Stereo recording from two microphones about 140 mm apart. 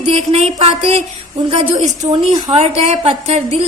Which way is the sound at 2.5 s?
50° right (ahead or behind).